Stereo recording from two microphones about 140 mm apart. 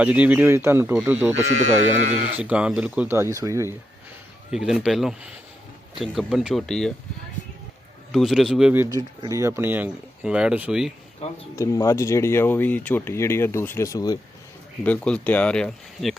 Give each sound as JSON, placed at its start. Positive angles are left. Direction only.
{"t": 0.0, "sound": "speech", "side_deg": -10}
{"t": 1.5, "sound": "speech", "side_deg": -55}
{"t": 2.4, "sound": "speech", "side_deg": -10}
{"t": 3.1, "sound": "speech", "side_deg": -20}
{"t": 4.5, "sound": "speech", "side_deg": -5}
{"t": 8.1, "sound": "speech", "side_deg": 0}
{"t": 8.7, "sound": "speech", "side_deg": -15}
{"t": 11.5, "sound": "speech", "side_deg": 20}
{"t": 14.8, "sound": "speech", "side_deg": 10}